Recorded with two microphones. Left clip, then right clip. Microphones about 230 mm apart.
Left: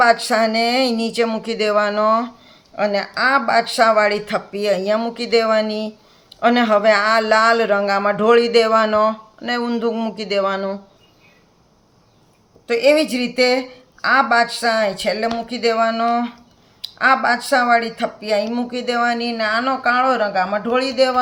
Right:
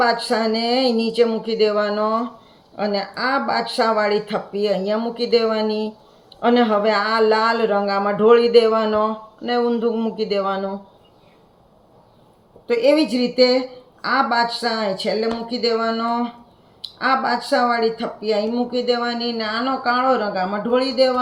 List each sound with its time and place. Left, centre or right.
0.0 s speech: left
12.6 s speech: left